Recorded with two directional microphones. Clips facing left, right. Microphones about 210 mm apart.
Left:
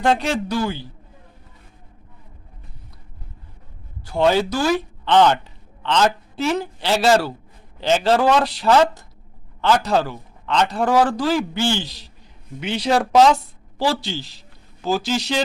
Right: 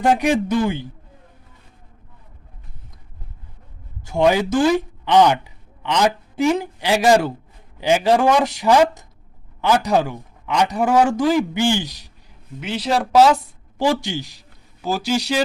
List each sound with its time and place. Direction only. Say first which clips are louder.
0.0 s a man's voice: right 3 dB; 15° right (ahead or behind)
4.1 s a man's voice: right 1 dB; 15° right (ahead or behind)
12.5 s speech: left 2 dB; centre (ahead or behind)
13.7 s a man's voice: right 2 dB; 15° right (ahead or behind)